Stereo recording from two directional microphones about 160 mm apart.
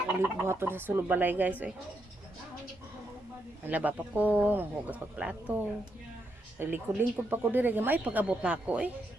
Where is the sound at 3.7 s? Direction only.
10° right (ahead or behind).